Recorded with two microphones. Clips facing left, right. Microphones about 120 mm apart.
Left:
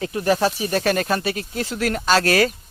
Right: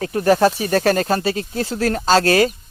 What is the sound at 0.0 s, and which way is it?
Speech, 45° right (ahead or behind).